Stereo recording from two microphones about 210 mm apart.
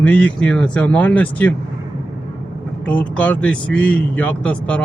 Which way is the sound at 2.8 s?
5° left (ahead or behind).